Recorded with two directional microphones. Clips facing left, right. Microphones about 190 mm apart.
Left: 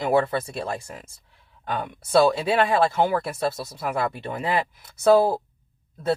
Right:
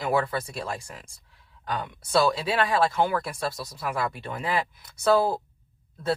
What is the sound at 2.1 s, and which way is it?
Speech, 25° left (ahead or behind).